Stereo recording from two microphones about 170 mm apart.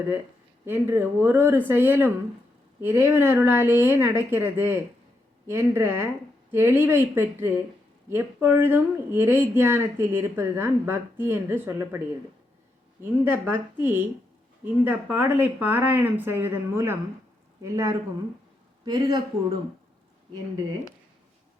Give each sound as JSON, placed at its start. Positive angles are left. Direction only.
{"t": 0.6, "sound": "speech", "side_deg": -15}
{"t": 13.0, "sound": "speech", "side_deg": -10}